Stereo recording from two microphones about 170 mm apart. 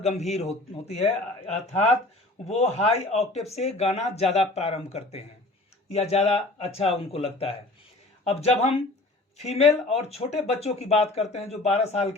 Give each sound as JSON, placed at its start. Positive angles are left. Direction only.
{"t": 0.0, "sound": "speech", "side_deg": 40}